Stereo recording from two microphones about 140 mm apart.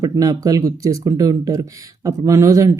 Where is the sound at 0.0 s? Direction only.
25° right (ahead or behind).